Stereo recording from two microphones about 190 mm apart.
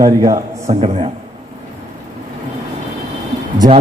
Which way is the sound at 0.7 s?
35° right (ahead or behind).